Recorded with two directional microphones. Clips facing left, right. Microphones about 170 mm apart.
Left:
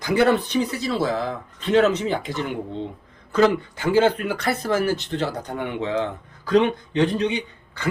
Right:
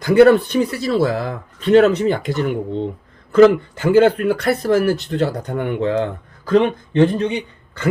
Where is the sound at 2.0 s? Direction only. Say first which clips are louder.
Right 6 dB; 60° right (ahead or behind).